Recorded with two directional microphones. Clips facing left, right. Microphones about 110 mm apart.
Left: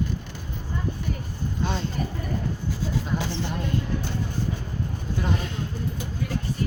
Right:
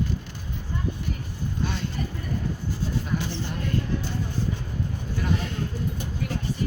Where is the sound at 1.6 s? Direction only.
30° left (ahead or behind).